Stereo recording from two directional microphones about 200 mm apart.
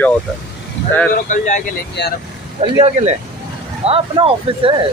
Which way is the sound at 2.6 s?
30° right (ahead or behind).